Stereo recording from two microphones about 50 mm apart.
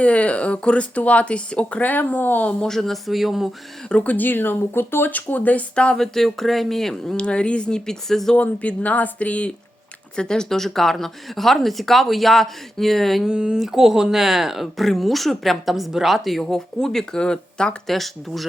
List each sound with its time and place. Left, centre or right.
0.0 s speech: left
1.9 s speech: left
2.6 s speech: centre
3.8 s speech: left
5.1 s speech: left
5.7 s speech: centre
6.0 s speech: centre
7.2 s speech: left
8.4 s speech: left
10.2 s speech: centre
13.2 s speech: centre
17.8 s speech: centre